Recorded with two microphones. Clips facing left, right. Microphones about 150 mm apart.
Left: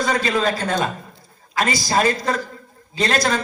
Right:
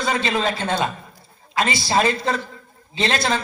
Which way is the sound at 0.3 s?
45° left (ahead or behind).